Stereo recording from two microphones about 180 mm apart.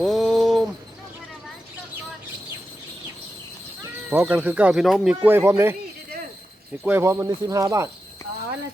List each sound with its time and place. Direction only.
0.0 s a sound: centre (ahead or behind)
4.1 s speech: 10° right (ahead or behind)
6.8 s speech: 15° right (ahead or behind)